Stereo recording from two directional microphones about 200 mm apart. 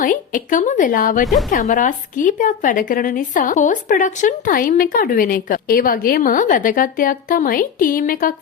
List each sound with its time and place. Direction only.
0.0 s a woman's voice: 40° left (ahead or behind)